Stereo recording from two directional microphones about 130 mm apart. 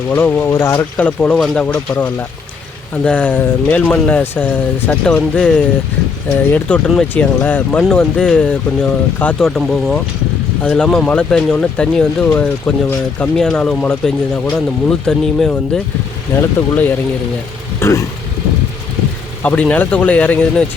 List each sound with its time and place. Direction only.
0.1 s speech: 15° left (ahead or behind)
1.0 s speech: 10° left (ahead or behind)
17.7 s speech: 20° left (ahead or behind)
19.4 s speech: 10° left (ahead or behind)